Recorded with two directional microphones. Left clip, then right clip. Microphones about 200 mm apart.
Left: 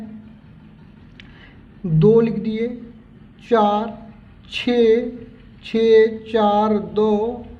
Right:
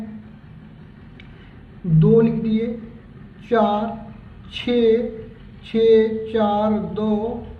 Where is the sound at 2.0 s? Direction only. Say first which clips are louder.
Left 2 dB; 60° left (ahead or behind).